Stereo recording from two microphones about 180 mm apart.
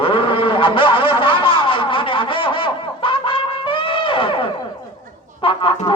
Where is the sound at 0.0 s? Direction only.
30° left (ahead or behind).